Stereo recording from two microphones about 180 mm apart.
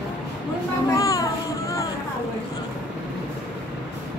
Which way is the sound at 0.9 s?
20° left (ahead or behind).